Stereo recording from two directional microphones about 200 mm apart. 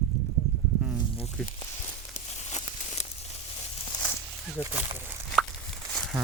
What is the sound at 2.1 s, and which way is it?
Crumpling, 35° left (ahead or behind).